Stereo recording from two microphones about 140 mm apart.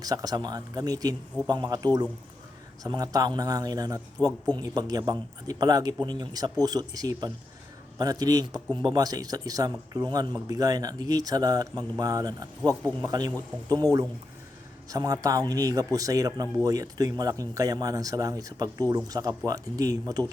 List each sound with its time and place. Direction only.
0.0 s speech: 25° right (ahead or behind)
14.8 s speech: 25° right (ahead or behind)